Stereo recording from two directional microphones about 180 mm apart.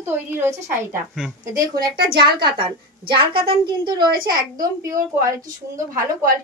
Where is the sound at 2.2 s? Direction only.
25° right (ahead or behind).